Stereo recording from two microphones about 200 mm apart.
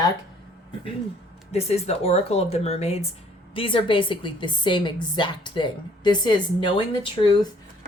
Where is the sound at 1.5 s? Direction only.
30° left (ahead or behind).